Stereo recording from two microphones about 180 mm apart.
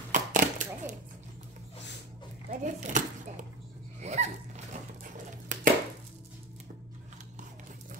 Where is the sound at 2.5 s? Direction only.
45° right (ahead or behind).